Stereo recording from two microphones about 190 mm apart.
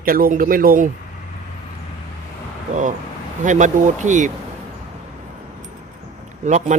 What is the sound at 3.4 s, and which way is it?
Speech, 40° right (ahead or behind).